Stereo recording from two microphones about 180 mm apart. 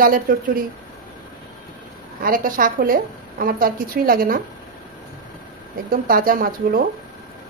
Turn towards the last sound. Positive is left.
turn(degrees=-50)  # may be behind; listen again after turning